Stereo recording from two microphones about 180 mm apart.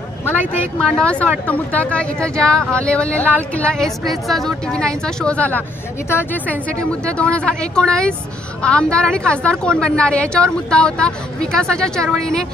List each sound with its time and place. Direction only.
0.7 s a woman's voice: 5° left (ahead or behind)